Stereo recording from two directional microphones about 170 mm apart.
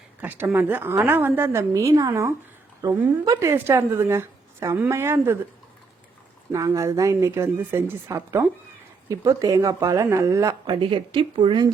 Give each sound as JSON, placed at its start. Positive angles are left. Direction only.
{"t": 0.2, "sound": "a woman's voice", "side_deg": -10}
{"t": 6.5, "sound": "a woman's voice", "side_deg": -20}